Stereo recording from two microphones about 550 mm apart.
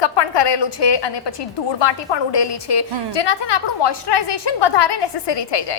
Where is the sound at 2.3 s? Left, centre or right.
Left.